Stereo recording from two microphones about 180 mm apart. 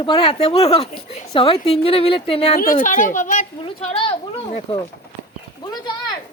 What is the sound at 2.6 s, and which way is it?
Speech, 50° left (ahead or behind).